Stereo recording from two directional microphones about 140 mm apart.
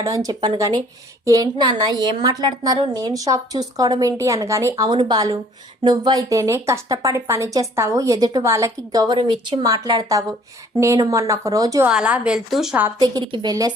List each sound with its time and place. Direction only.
0.0 s a woman's voice: 25° right (ahead or behind)
4.9 s a woman's voice: 35° right (ahead or behind)
11.9 s a woman's voice: 5° right (ahead or behind)
13.0 s a woman's voice: 30° right (ahead or behind)